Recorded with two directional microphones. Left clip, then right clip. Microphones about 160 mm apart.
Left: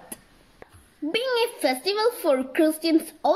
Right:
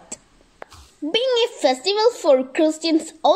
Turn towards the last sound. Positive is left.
turn(degrees=-25)  # may be behind; listen again after turning